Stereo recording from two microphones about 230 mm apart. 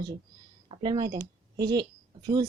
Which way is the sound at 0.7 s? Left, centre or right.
Centre.